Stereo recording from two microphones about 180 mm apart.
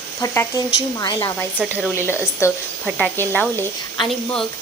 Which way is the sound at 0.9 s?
20° left (ahead or behind).